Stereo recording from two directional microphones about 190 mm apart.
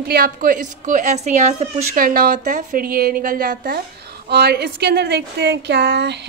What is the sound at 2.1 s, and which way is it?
A woman's voice, 50° right (ahead or behind).